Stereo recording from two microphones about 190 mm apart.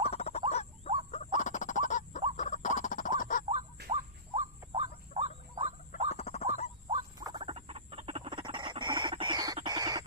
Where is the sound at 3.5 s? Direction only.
35° right (ahead or behind).